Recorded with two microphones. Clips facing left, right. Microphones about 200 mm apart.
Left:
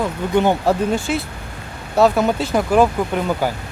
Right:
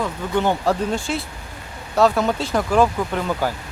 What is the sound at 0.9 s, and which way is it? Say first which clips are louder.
Speech: left 4 dB; centre (ahead or behind).